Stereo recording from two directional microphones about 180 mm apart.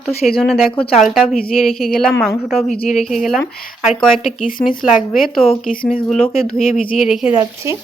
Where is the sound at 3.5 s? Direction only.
55° left (ahead or behind).